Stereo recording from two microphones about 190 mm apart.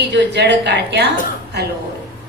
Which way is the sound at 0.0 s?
65° right (ahead or behind).